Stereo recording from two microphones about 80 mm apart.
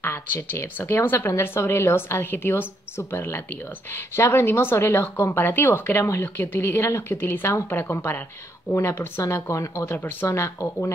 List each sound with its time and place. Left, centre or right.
0.0 s speech: left